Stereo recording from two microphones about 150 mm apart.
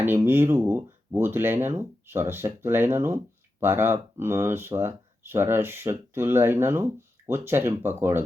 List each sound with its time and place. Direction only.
0.0 s speech: 15° right (ahead or behind)